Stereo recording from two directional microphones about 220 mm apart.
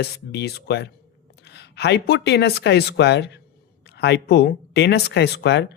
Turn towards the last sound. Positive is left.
turn(degrees=50)  # may be behind; listen again after turning